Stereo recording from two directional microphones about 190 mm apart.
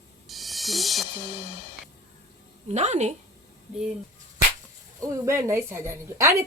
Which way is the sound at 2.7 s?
35° right (ahead or behind).